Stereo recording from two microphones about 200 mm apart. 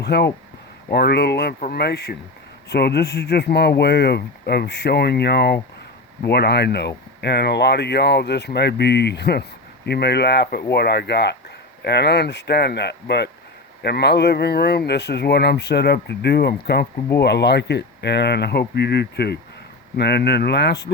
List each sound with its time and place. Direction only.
0.0 s speech: 55° left (ahead or behind)